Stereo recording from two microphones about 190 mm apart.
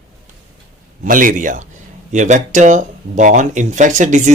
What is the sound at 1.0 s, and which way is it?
Speech, 45° right (ahead or behind).